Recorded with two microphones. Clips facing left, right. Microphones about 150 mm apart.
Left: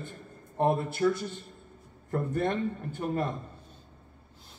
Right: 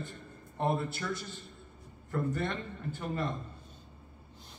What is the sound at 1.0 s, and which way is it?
A man's voice, 40° left (ahead or behind).